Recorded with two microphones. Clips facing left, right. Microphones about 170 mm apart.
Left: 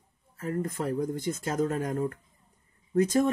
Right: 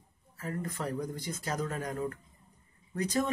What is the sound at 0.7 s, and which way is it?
Speech, 50° left (ahead or behind).